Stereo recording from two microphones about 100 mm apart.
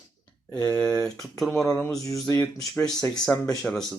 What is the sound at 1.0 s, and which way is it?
Speech, centre (ahead or behind).